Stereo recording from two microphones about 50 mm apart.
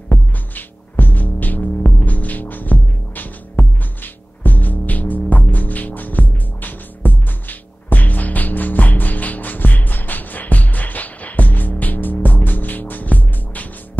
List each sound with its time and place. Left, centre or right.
0.1 s music: left